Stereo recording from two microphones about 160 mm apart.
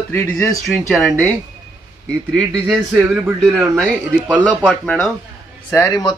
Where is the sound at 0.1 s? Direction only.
20° left (ahead or behind).